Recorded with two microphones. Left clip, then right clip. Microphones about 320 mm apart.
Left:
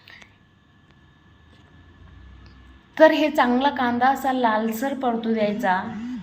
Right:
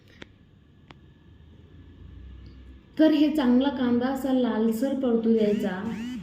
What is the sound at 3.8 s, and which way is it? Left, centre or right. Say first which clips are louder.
Speech: left 7 dB; left.